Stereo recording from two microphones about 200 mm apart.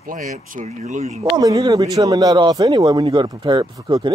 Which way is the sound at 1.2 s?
20° right (ahead or behind).